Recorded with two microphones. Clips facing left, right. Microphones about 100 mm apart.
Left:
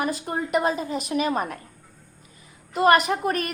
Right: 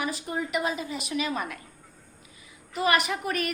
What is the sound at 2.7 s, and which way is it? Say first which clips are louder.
Speech: left 7 dB; 45° left (ahead or behind).